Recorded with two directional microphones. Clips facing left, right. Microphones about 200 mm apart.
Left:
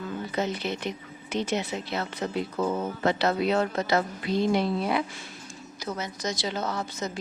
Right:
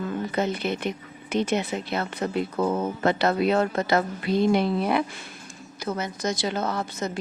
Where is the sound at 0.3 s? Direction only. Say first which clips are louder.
Right 2 dB; 55° right (ahead or behind).